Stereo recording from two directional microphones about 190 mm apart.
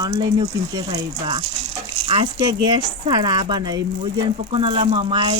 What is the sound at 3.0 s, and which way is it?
Speech, 20° right (ahead or behind).